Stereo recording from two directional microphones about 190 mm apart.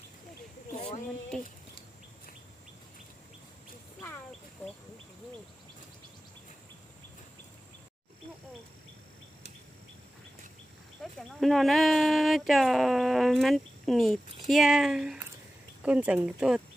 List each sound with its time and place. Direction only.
0.7 s a sound: 35° left (ahead or behind)
1.3 s speech: 5° left (ahead or behind)
11.0 s speech: centre (ahead or behind)